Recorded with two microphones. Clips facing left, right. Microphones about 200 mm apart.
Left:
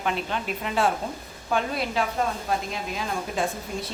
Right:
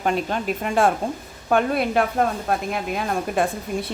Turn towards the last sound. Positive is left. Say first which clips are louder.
# right 5 dB
turn(degrees=-55)  # may be behind; listen again after turning